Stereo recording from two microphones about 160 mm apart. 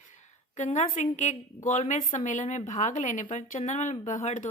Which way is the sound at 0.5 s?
50° left (ahead or behind).